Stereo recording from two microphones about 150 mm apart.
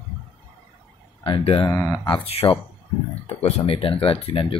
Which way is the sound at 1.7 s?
20° left (ahead or behind).